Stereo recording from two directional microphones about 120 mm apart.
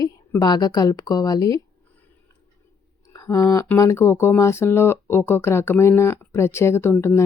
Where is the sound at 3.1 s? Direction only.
30° left (ahead or behind).